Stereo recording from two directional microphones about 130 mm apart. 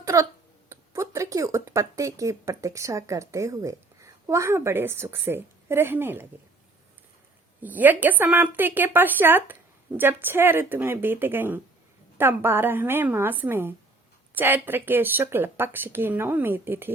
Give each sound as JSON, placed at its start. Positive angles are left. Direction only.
{"t": 0.0, "sound": "a sound", "side_deg": -25}
{"t": 0.7, "sound": "speech", "side_deg": -25}
{"t": 7.6, "sound": "speech", "side_deg": -15}